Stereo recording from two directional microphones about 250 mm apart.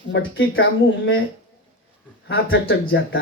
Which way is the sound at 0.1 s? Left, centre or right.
Left.